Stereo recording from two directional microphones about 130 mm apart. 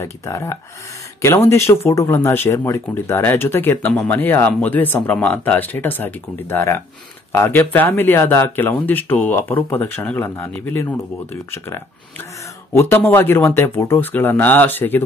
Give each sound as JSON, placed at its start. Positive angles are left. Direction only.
{"t": 0.0, "sound": "speech", "side_deg": 20}